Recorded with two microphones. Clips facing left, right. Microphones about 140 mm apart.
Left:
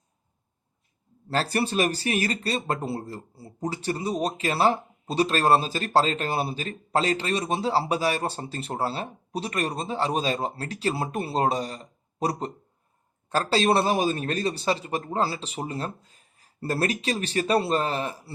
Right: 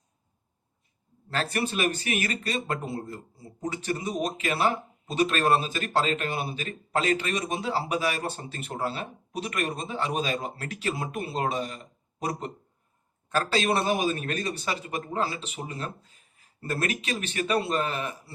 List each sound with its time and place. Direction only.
1.3 s speech: 35° left (ahead or behind)